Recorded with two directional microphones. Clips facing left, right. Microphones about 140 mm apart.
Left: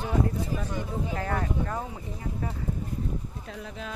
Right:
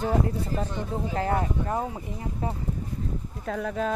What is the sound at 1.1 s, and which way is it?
Speech, 25° right (ahead or behind).